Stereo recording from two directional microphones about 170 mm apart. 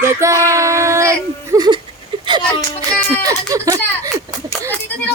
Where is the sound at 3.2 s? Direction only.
20° right (ahead or behind).